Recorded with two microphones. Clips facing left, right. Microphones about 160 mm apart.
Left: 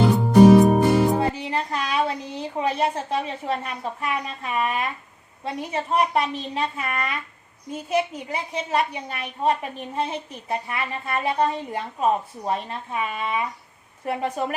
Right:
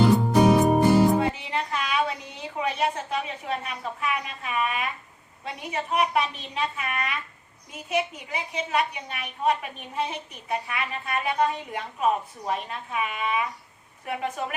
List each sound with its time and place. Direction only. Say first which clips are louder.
0.0 s music: left 5 dB; centre (ahead or behind)
1.2 s a sound: left 2 dB; 35° left (ahead or behind)
4.0 s a woman's voice: left 1 dB; 35° left (ahead or behind)